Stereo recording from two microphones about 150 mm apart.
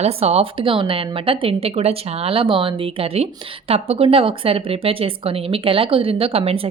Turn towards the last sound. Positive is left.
turn(degrees=-40)  # may be behind; listen again after turning